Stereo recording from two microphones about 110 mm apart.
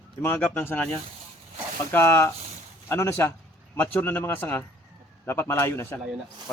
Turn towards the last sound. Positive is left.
turn(degrees=25)  # may be behind; listen again after turning